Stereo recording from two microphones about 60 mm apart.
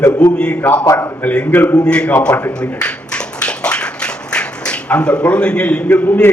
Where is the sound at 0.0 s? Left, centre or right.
Left.